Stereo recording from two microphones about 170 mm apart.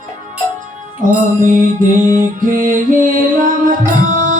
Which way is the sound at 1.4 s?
50° right (ahead or behind).